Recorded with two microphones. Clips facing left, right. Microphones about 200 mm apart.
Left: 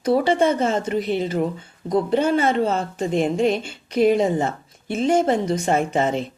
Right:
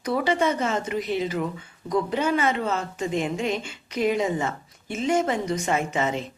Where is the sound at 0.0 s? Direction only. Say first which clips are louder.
Left 5 dB; 30° left (ahead or behind).